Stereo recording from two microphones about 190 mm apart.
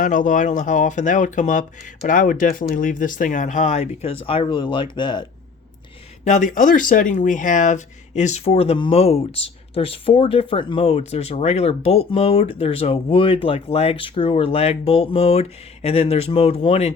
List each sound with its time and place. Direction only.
0.0 s speech: 45° left (ahead or behind); by 5.2 s 25° left (ahead or behind)
6.2 s speech: 40° left (ahead or behind)